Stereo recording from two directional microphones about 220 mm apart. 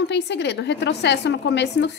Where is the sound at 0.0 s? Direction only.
50° left (ahead or behind).